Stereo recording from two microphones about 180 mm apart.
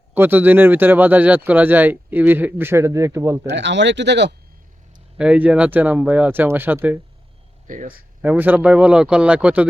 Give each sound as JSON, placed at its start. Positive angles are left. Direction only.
{"t": 0.1, "sound": "speech", "side_deg": -10}
{"t": 3.5, "sound": "speech", "side_deg": -80}
{"t": 5.1, "sound": "speech", "side_deg": -5}
{"t": 7.7, "sound": "speech", "side_deg": -50}
{"t": 8.2, "sound": "speech", "side_deg": -10}